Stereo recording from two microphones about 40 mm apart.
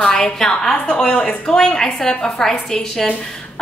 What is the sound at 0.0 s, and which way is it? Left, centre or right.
A woman's voice, centre.